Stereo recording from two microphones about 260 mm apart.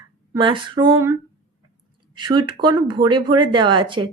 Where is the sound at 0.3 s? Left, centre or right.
Centre.